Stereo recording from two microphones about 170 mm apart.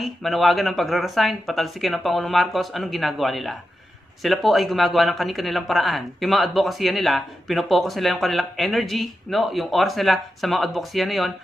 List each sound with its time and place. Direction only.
0.0 s a man's voice: centre (ahead or behind)